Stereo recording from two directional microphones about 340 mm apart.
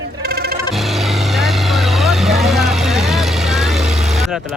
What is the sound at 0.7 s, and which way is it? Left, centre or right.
Vehicle, centre.